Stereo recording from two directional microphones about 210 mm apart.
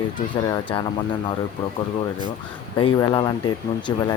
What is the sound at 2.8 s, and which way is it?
Speech, 25° left (ahead or behind).